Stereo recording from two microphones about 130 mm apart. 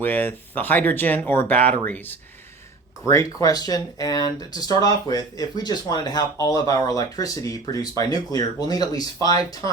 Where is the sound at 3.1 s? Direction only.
25° left (ahead or behind).